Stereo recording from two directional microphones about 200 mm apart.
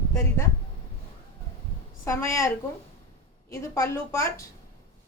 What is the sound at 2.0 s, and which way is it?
A woman's voice, 15° left (ahead or behind).